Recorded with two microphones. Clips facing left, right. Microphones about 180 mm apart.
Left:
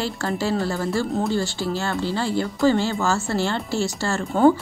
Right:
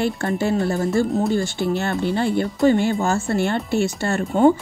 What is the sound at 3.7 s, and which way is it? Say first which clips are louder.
Speech: right 4 dB; 20° right (ahead or behind).